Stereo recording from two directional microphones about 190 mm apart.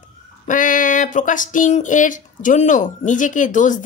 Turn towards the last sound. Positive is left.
turn(degrees=40)  # may be behind; listen again after turning